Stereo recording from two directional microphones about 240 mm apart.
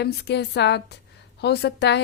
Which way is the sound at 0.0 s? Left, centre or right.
Left.